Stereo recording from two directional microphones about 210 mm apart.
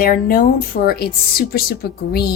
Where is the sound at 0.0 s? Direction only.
45° left (ahead or behind).